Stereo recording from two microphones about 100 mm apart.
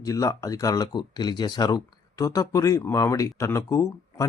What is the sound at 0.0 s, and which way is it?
Speech, 35° left (ahead or behind).